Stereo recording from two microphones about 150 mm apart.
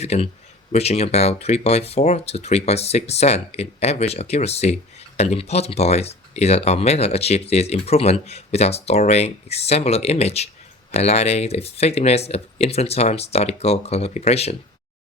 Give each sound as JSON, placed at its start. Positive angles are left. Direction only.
{"t": 0.0, "sound": "speech", "side_deg": 45}